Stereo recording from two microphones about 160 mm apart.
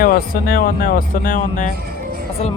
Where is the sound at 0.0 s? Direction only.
65° left (ahead or behind).